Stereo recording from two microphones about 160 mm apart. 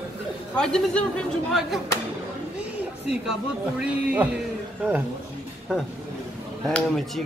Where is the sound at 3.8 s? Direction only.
10° right (ahead or behind).